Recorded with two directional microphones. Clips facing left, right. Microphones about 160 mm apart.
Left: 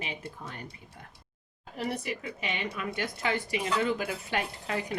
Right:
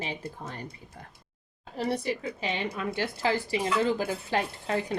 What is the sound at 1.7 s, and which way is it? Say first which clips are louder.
A woman's voice: right 4 dB; 35° right (ahead or behind).